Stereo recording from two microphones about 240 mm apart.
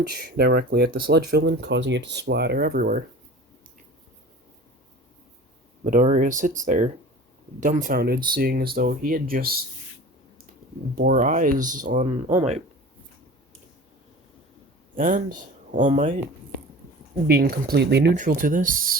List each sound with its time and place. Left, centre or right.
0.1 s speech: right
5.8 s speech: right
10.9 s speech: right
14.9 s speech: right
17.2 s speech: right
18.1 s speech: right